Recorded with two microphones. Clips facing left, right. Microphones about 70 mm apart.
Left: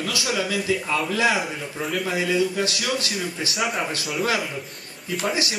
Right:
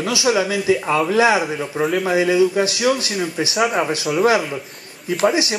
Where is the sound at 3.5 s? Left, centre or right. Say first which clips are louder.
Right 7 dB; centre.